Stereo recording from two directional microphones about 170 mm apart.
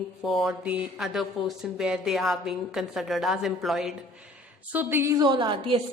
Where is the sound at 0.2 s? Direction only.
Centre (ahead or behind).